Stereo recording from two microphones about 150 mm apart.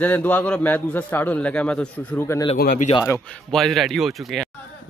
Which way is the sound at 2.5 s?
90° left.